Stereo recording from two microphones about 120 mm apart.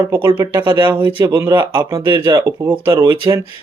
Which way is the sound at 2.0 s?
40° right (ahead or behind).